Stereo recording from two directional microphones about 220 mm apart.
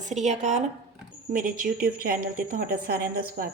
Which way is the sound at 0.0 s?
30° right (ahead or behind).